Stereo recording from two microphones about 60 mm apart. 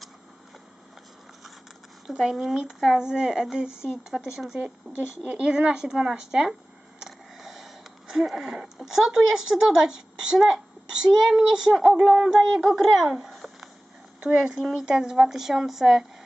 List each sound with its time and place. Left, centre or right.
2.0 s speech: centre
4.9 s speech: right
5.3 s speech: centre
14.2 s a child's voice: centre